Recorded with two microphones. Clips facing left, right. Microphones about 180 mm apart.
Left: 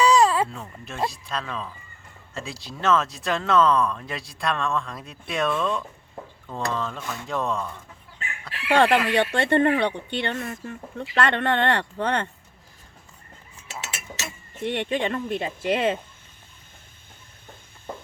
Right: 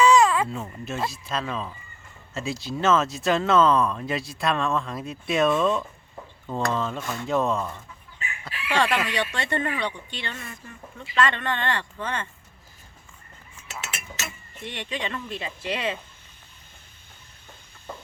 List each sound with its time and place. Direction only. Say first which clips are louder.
0.0 s baby cry: even; 35° left (ahead or behind)
0.4 s speech: right 4 dB; 5° right (ahead or behind)
8.5 s speech: left 5 dB; 65° left (ahead or behind)
13.7 s a sound: left 1 dB; 25° left (ahead or behind)
14.6 s speech: left 7 dB; 55° left (ahead or behind)